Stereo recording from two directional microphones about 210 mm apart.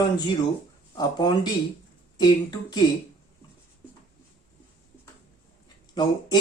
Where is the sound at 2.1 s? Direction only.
20° left (ahead or behind).